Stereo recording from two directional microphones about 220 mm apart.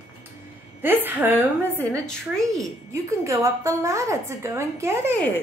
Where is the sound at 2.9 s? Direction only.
15° right (ahead or behind).